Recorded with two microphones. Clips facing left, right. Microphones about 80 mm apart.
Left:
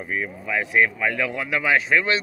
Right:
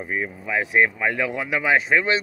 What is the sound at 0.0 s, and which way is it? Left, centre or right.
Speech, centre.